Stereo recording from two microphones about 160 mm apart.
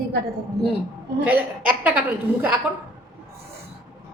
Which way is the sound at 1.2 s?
10° right (ahead or behind).